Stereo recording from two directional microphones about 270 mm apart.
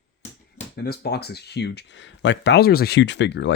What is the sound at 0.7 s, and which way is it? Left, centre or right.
Speech, left.